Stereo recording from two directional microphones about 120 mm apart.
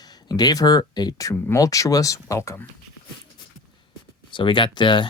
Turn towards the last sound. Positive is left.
turn(degrees=40)  # may be behind; listen again after turning